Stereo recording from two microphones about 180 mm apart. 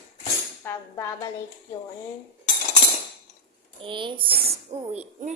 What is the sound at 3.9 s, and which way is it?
Speech, 25° right (ahead or behind).